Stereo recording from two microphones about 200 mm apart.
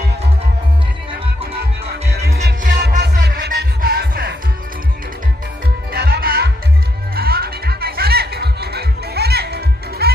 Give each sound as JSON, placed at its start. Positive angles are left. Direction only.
{"t": 2.6, "sound": "music", "side_deg": -45}
{"t": 5.9, "sound": "music", "side_deg": -55}